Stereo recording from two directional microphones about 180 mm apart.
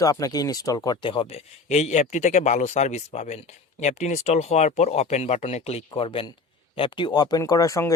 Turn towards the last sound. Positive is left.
turn(degrees=15)  # may be behind; listen again after turning